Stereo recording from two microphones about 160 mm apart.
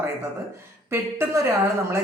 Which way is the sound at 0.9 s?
15° right (ahead or behind).